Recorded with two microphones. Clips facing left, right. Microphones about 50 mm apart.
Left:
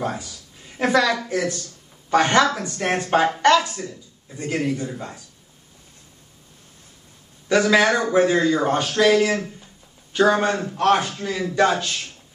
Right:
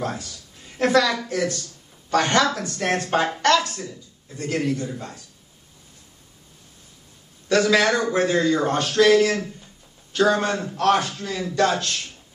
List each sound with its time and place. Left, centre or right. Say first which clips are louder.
0.0 s speech: left 2 dB; centre
7.4 s speech: left 1 dB; centre